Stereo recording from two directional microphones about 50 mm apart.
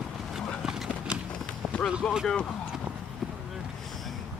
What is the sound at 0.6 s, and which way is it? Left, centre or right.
Clip-clop, centre.